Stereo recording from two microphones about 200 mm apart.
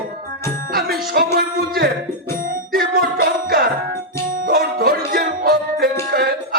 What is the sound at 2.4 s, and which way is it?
Music, 45° right (ahead or behind).